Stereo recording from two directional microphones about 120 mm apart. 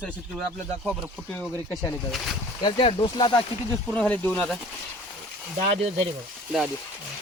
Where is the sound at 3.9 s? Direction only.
15° left (ahead or behind).